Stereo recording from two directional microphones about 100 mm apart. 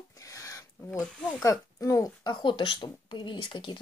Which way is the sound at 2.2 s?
50° left (ahead or behind).